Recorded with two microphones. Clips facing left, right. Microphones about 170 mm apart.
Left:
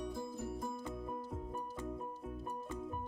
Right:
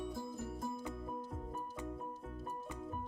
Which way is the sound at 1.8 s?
10° left (ahead or behind).